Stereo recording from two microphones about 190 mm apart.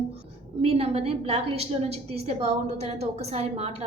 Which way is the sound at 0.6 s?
30° right (ahead or behind).